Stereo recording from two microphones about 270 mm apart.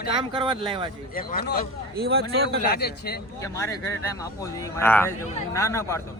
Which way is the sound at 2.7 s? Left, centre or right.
Left.